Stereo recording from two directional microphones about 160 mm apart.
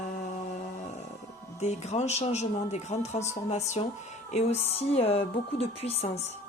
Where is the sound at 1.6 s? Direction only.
45° left (ahead or behind).